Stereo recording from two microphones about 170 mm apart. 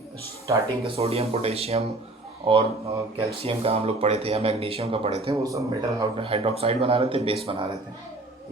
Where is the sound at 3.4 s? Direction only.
35° right (ahead or behind).